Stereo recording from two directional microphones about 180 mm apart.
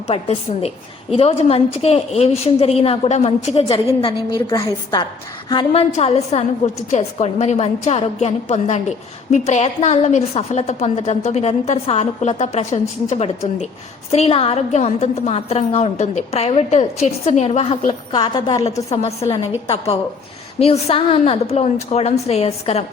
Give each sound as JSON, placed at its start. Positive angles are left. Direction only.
{"t": 0.1, "sound": "a woman's voice", "side_deg": 35}
{"t": 4.4, "sound": "a woman's voice", "side_deg": 20}
{"t": 5.7, "sound": "a woman's voice", "side_deg": 35}
{"t": 18.1, "sound": "a woman's voice", "side_deg": 25}
{"t": 18.6, "sound": "a woman's voice", "side_deg": 35}